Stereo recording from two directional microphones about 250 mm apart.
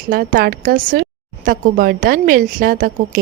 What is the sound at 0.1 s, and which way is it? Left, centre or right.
A woman's voice, right.